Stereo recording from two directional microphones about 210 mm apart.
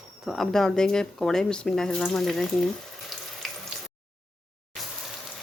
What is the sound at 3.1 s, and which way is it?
Sink, centre (ahead or behind).